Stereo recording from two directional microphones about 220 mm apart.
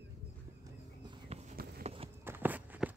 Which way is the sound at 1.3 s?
35° right (ahead or behind).